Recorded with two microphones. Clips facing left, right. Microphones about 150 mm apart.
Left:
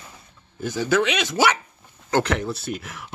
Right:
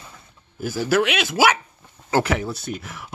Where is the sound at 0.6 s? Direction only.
5° right (ahead or behind).